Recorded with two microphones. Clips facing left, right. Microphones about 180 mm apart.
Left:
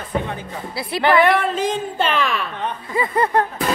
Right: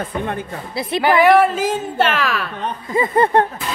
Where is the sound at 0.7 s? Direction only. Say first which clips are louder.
Right 5 dB; 20° right (ahead or behind).